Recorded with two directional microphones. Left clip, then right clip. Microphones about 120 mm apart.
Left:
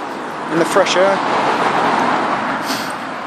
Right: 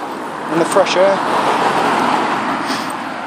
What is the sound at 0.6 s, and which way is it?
Speech, 15° left (ahead or behind).